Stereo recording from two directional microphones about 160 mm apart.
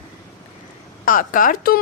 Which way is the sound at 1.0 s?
55° left (ahead or behind).